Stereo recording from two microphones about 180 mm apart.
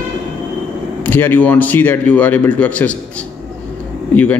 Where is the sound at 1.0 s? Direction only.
10° left (ahead or behind).